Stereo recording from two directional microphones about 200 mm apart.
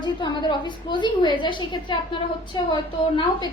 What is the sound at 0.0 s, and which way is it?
A woman's voice, 20° left (ahead or behind).